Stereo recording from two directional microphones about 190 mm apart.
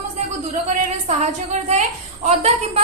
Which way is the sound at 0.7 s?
35° right (ahead or behind).